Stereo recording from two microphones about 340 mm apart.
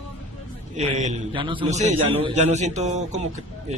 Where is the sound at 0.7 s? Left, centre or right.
Centre.